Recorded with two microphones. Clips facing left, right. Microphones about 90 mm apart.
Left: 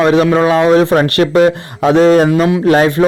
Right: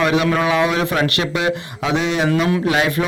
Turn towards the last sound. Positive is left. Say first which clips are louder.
# left 8 dB
turn(degrees=40)  # may be behind; listen again after turning